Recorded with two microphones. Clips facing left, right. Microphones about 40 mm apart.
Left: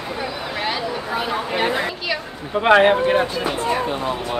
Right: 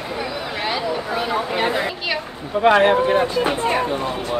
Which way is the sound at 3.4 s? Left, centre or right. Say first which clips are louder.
Right 2 dB; right.